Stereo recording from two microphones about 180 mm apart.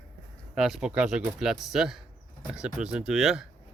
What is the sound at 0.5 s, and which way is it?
Speech, centre (ahead or behind).